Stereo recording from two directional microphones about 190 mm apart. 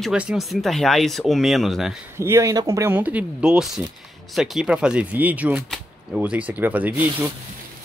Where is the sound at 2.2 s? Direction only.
15° right (ahead or behind).